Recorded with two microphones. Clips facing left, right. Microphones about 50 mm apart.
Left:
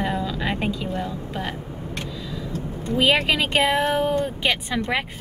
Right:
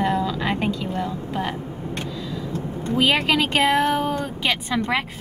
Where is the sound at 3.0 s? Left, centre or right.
Centre.